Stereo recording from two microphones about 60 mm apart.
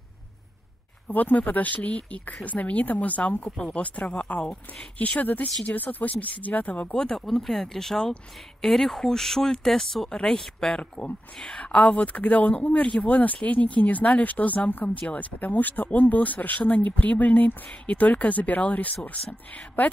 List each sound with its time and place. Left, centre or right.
1.0 s speech: left
3.4 s speech: centre
3.7 s speech: left
4.9 s speech: left
7.0 s speech: centre; by 19.9 s left